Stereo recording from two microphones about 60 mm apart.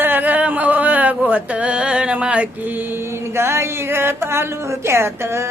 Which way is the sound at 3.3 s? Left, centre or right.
Right.